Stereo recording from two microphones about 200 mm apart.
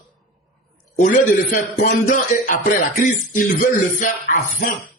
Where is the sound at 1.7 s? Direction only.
45° left (ahead or behind).